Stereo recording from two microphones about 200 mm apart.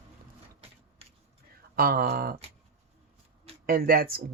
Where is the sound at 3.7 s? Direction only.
45° right (ahead or behind).